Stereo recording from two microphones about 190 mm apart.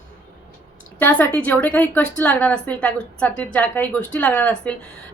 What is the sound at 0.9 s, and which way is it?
A woman's voice, 10° left (ahead or behind).